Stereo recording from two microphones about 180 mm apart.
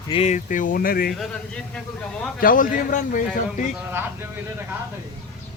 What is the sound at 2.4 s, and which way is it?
Speech, 50° left (ahead or behind).